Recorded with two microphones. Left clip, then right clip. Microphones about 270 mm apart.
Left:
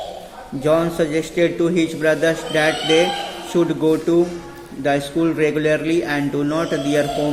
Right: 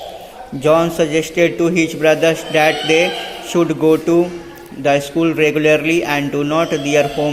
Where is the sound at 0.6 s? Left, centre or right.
Centre.